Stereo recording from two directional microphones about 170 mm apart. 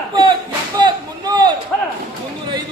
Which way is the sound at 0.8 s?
25° right (ahead or behind).